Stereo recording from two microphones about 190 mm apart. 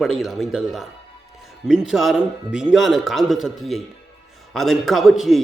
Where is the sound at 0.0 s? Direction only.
Centre (ahead or behind).